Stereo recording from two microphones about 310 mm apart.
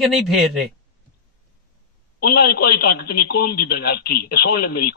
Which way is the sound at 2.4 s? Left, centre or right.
Left.